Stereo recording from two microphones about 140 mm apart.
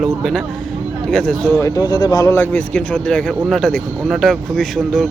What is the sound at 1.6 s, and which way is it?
Speech, 25° left (ahead or behind).